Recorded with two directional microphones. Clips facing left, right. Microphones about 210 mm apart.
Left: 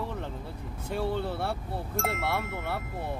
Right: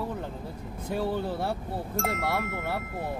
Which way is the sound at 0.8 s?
10° right (ahead or behind).